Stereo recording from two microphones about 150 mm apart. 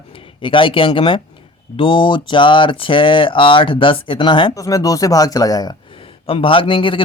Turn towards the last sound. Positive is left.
turn(degrees=35)  # may be behind; listen again after turning